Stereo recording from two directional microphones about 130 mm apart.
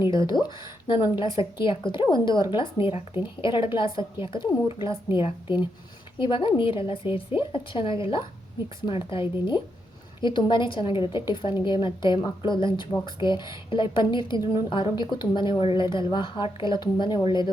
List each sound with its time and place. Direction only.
0.1 s a woman's voice: 35° left (ahead or behind)